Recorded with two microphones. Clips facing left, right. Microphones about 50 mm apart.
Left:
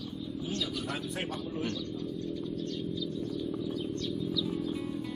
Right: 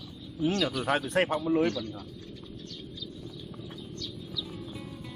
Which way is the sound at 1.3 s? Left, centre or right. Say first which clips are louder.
Right 10 dB; right.